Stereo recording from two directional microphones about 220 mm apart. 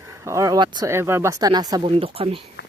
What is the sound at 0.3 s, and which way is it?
Speech, 15° right (ahead or behind).